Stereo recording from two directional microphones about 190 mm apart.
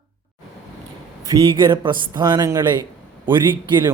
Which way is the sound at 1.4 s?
25° right (ahead or behind).